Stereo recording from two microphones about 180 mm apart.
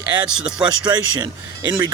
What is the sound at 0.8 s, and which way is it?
Speech, 20° right (ahead or behind).